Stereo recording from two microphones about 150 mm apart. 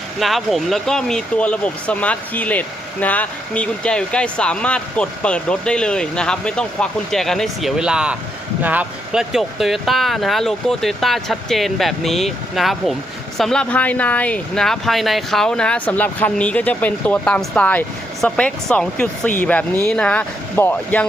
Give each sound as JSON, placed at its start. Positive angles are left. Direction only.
{"t": 0.2, "sound": "speech", "side_deg": 0}